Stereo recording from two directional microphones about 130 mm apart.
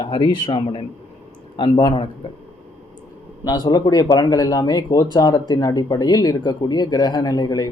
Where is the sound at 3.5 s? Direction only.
30° left (ahead or behind).